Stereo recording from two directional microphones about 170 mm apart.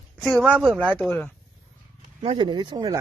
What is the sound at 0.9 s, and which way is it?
Speech, 10° left (ahead or behind).